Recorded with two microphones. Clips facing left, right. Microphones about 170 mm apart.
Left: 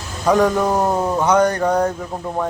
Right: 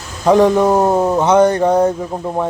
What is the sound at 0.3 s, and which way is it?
Speech, 25° right (ahead or behind).